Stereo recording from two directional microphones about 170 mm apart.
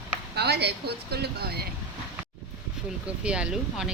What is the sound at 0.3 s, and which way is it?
Speech, 70° right (ahead or behind).